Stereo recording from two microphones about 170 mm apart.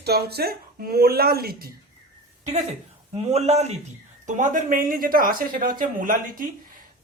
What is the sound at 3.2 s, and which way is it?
A man's voice, 40° right (ahead or behind).